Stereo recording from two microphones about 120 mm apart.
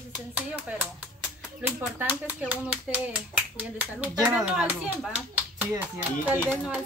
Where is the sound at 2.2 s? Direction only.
15° right (ahead or behind).